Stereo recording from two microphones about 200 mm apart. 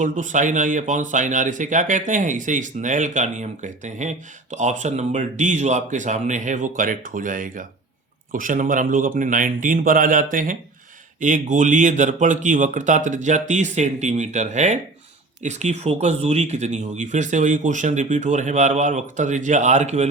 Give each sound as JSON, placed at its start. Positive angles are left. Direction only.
{"t": 0.0, "sound": "a man's voice", "side_deg": -40}